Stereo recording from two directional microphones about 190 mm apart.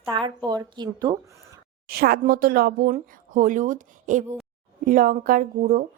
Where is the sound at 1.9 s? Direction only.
50° right (ahead or behind).